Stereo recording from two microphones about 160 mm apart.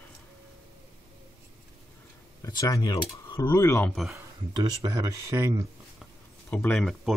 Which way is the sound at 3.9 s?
Centre (ahead or behind).